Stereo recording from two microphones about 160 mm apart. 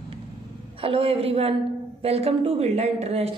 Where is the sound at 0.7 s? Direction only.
35° right (ahead or behind).